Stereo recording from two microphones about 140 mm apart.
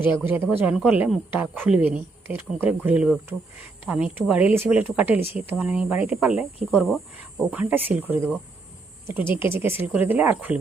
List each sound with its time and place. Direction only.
0.0 s a woman's voice: 15° right (ahead or behind)
7.5 s a woman's voice: 10° right (ahead or behind)